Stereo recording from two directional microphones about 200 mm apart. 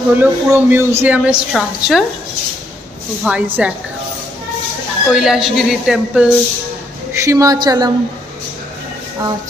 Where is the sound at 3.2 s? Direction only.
5° right (ahead or behind).